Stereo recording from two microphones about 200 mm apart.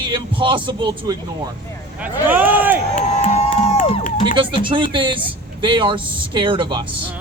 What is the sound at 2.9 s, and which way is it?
Music, 35° left (ahead or behind).